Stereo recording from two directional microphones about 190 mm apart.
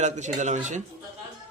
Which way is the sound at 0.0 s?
40° right (ahead or behind).